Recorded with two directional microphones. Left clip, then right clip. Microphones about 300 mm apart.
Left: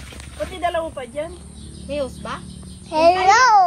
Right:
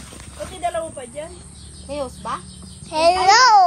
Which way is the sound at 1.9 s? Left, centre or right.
Centre.